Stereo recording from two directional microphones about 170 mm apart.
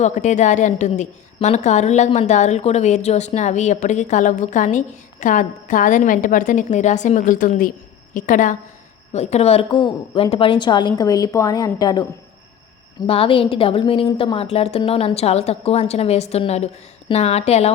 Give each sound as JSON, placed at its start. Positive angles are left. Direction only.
{"t": 0.0, "sound": "a woman's voice", "side_deg": 45}
{"t": 9.1, "sound": "a woman's voice", "side_deg": 40}
{"t": 13.1, "sound": "a woman's voice", "side_deg": 30}